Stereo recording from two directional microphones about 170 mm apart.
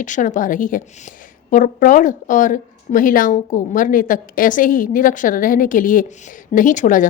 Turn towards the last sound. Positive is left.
turn(degrees=50)  # may be behind; listen again after turning